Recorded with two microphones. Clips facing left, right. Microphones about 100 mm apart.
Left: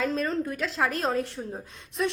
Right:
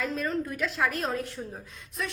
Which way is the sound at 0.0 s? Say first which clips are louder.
Left 3 dB; 30° left (ahead or behind).